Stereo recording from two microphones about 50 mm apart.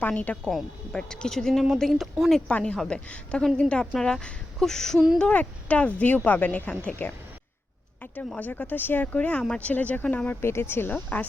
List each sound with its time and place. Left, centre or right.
0.0 s speech: left
0.9 s speech: centre
2.5 s a woman's voice: left
2.7 s a woman's voice: centre
5.3 s speech: left
8.4 s speech: left
9.1 s a woman's voice: left
10.4 s speech: left
10.9 s speech: left